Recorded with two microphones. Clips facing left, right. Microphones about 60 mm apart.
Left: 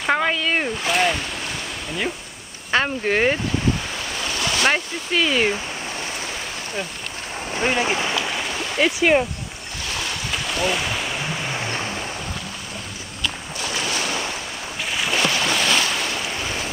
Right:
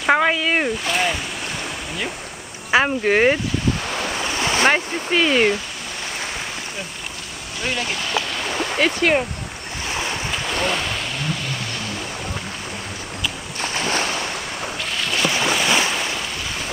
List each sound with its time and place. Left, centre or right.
0.0 s speech: centre
0.8 s speech: centre
2.7 s speech: centre
4.2 s waves: right
4.7 s speech: centre
7.5 s speech: left; by 8.9 s centre
10.6 s boat: centre
11.2 s vehicle: left
13.6 s boat: right
15.0 s boat: centre
15.3 s boat: centre